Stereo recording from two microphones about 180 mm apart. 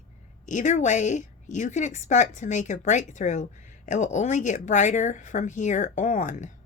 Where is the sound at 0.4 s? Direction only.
40° left (ahead or behind).